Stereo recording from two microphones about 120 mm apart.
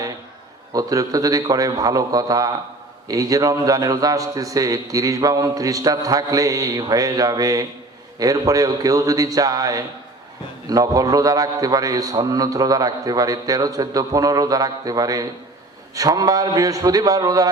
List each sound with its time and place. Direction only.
0.7 s a man's voice: 30° right (ahead or behind)